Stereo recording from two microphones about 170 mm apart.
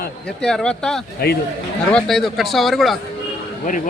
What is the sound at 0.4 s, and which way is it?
A man's voice, 5° left (ahead or behind).